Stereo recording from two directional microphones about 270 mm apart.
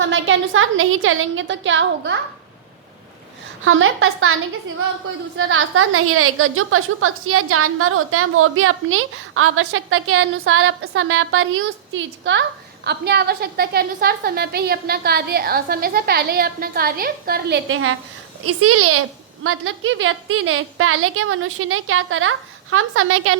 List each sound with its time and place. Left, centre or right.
0.0 s a woman's voice: right
3.6 s a woman's voice: right
5.4 s a woman's voice: right